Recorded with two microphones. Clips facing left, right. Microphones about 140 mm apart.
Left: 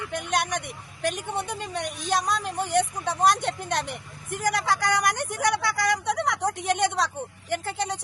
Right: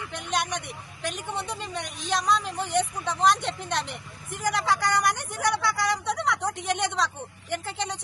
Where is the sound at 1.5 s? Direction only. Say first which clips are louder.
Left 3 dB; 50° left (ahead or behind).